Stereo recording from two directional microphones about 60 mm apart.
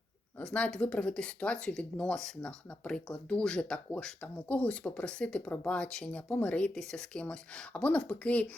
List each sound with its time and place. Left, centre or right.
0.4 s speech: centre
6.7 s speech: centre